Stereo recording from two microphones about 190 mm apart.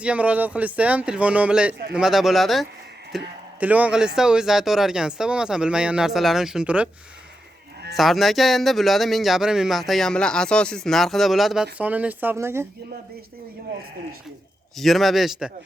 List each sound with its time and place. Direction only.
0.0 s speech: 5° right (ahead or behind)
7.9 s speech: centre (ahead or behind)
14.8 s speech: centre (ahead or behind)